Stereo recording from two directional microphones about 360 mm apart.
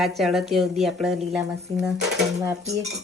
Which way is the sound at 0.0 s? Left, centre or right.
Centre.